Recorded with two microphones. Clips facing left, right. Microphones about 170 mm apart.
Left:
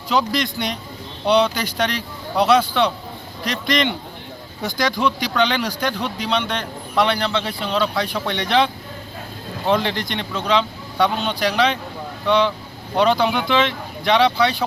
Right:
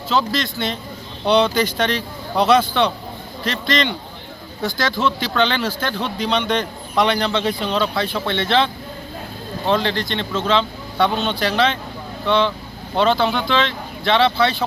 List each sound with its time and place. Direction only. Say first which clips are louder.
0.1 s speech: even; 15° left (ahead or behind)